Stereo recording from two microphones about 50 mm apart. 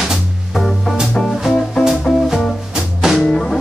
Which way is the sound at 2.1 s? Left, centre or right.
Centre.